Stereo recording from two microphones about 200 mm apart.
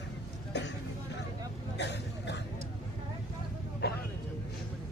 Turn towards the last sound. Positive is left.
turn(degrees=50)  # may be behind; listen again after turning